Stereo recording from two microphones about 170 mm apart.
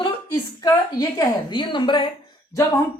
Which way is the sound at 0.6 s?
20° left (ahead or behind).